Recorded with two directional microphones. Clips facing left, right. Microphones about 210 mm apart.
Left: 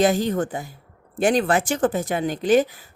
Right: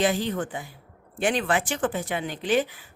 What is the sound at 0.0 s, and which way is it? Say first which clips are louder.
A woman's voice: left 5 dB; 45° left (ahead or behind).